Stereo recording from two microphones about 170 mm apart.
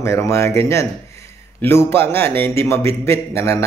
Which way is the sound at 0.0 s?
15° left (ahead or behind).